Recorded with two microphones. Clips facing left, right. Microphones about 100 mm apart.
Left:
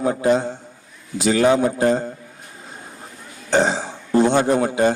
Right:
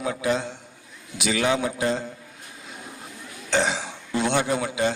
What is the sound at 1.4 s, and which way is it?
Speech, 45° left (ahead or behind).